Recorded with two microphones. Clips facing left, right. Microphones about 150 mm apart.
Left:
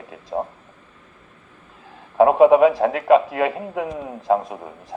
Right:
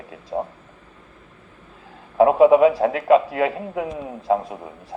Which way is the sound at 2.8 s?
35° left (ahead or behind).